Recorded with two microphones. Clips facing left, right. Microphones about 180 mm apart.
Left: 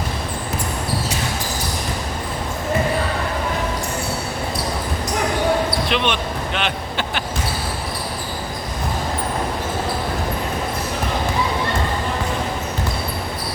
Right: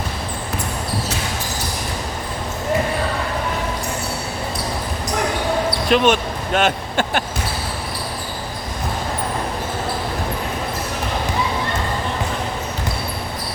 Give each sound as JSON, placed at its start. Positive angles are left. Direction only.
{"t": 5.9, "sound": "speech", "side_deg": -45}